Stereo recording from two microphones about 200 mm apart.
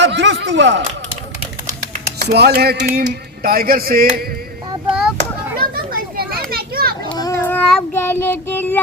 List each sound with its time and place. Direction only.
0.0 s a sound: 60° right (ahead or behind)
2.1 s speech: 55° right (ahead or behind)
5.5 s children playing: 50° right (ahead or behind)
7.2 s child singing: 15° left (ahead or behind)